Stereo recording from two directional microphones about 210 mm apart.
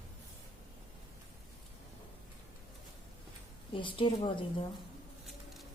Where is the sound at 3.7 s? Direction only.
25° left (ahead or behind).